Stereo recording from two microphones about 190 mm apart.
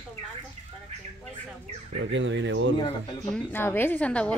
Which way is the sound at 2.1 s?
70° right (ahead or behind).